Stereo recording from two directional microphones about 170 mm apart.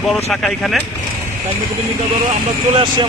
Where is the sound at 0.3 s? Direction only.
5° left (ahead or behind).